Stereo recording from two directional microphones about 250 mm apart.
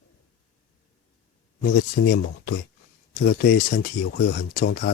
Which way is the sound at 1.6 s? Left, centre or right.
Left.